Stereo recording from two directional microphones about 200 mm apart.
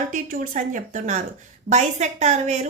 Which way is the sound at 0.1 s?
40° right (ahead or behind).